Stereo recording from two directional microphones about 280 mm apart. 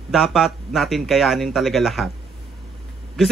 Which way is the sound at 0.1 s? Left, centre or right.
Centre.